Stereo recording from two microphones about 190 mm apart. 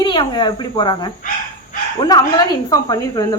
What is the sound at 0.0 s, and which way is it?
Speech, 25° left (ahead or behind).